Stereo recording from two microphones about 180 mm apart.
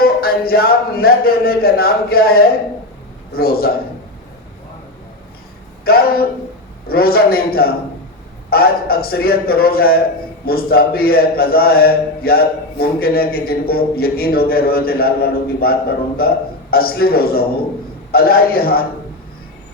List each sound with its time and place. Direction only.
0.0 s a man's voice: 55° left (ahead or behind)
5.8 s a man's voice: 60° left (ahead or behind)
16.7 s a man's voice: 60° left (ahead or behind)